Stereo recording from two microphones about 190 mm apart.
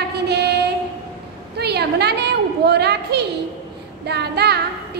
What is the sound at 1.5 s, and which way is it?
A woman's voice, 60° right (ahead or behind).